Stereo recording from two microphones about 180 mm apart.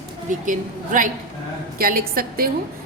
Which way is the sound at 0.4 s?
45° right (ahead or behind).